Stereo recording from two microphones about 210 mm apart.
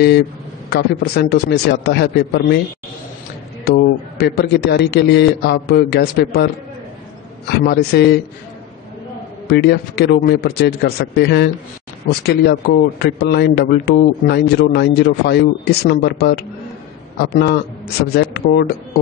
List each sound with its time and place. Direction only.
0.7 s a man's voice: 50° left (ahead or behind)
3.6 s a man's voice: 50° left (ahead or behind)
9.5 s a man's voice: 50° left (ahead or behind)